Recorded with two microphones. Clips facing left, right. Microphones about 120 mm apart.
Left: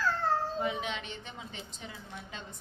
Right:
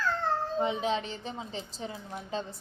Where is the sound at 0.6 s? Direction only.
30° right (ahead or behind).